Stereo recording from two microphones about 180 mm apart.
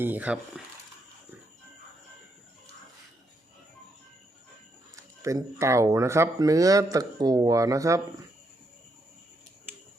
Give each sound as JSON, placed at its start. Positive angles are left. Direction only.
{"t": 0.0, "sound": "speech", "side_deg": -10}
{"t": 5.2, "sound": "speech", "side_deg": -15}